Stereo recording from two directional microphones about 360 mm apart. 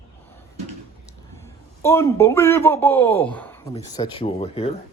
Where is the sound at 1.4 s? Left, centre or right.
Centre.